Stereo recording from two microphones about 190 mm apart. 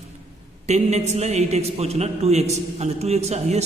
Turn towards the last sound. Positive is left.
turn(degrees=-35)  # may be behind; listen again after turning